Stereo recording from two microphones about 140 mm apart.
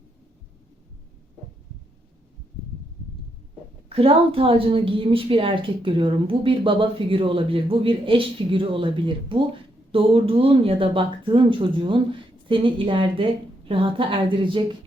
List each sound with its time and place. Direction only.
3.8 s a woman's voice: 40° right (ahead or behind)